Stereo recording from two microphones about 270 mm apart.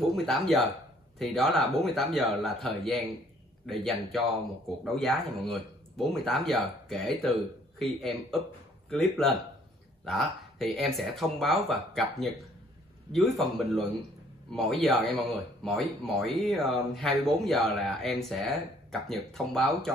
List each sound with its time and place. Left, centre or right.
0.1 s speech: centre